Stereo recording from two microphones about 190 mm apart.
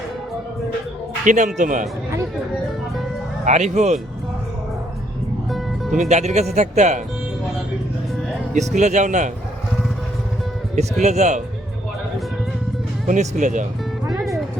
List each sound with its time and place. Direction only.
1.2 s speech: 40° right (ahead or behind)
3.4 s speech: 35° right (ahead or behind)
5.5 s music: centre (ahead or behind)
6.0 s speech: 35° right (ahead or behind)
8.5 s speech: 40° right (ahead or behind)
10.8 s speech: 35° right (ahead or behind)
13.1 s speech: 40° right (ahead or behind)